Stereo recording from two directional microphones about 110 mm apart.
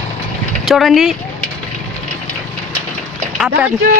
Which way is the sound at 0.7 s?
Centre (ahead or behind).